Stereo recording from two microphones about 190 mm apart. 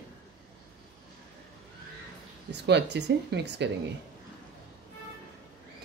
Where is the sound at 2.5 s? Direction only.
65° right (ahead or behind).